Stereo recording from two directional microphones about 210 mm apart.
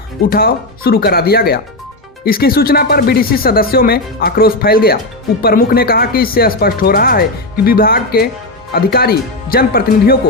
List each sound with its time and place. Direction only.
0.2 s speech: 45° left (ahead or behind)